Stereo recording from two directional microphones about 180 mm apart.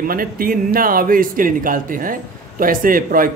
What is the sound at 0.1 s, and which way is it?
Speech, 50° right (ahead or behind).